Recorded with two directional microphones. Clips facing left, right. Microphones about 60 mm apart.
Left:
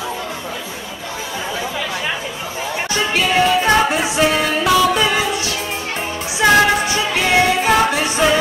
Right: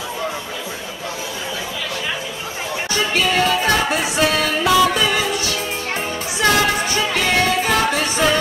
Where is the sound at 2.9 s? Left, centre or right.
Centre.